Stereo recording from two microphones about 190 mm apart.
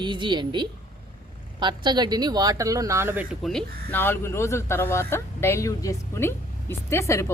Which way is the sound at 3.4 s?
5° left (ahead or behind).